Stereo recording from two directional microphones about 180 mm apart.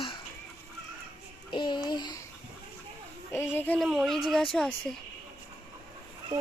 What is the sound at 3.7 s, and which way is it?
Speech, centre (ahead or behind).